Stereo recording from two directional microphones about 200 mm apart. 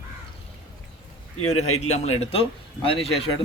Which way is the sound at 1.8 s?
35° left (ahead or behind).